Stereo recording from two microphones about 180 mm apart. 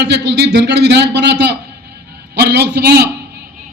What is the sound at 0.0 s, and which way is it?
A man's voice, 70° right (ahead or behind).